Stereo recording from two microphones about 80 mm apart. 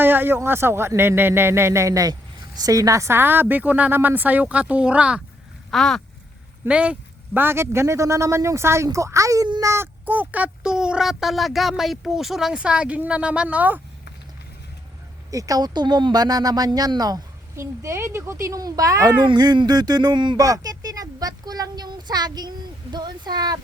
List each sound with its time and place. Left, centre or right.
0.0 s a sound: right
0.3 s speech: right; by 5.2 s centre
5.7 s speech: centre
6.7 s speech: centre
7.3 s speech: right
15.3 s a child's voice: right
17.6 s a child's voice: right
19.2 s a child's voice: right
20.4 s a child's voice: right